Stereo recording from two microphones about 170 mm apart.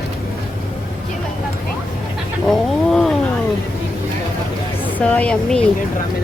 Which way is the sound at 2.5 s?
5° left (ahead or behind).